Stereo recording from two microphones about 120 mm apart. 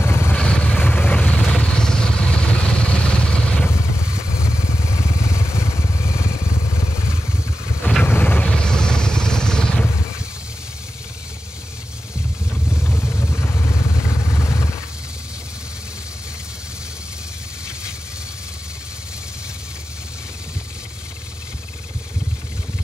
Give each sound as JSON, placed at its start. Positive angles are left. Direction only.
{"t": 0.0, "sound": "vehicle", "side_deg": 20}
{"t": 0.4, "sound": "vehicle", "side_deg": 10}
{"t": 4.8, "sound": "vehicle", "side_deg": 25}
{"t": 8.0, "sound": "vehicle", "side_deg": 15}
{"t": 12.8, "sound": "vehicle", "side_deg": 20}